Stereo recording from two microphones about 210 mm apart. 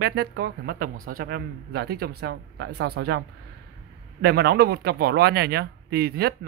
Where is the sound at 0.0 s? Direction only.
50° right (ahead or behind).